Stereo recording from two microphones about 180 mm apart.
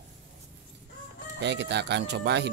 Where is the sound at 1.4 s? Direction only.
75° right (ahead or behind).